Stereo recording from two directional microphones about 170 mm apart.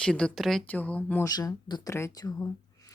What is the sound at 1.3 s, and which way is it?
Speech, 20° left (ahead or behind).